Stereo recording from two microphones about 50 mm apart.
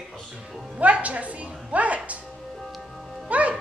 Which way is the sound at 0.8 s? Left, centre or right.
Right.